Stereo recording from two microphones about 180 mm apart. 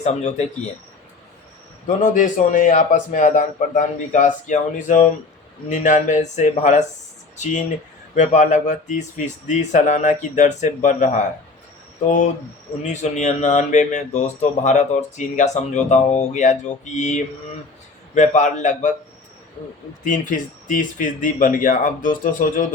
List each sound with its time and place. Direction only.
2.1 s speech: 45° left (ahead or behind)
20.1 s speech: 45° left (ahead or behind)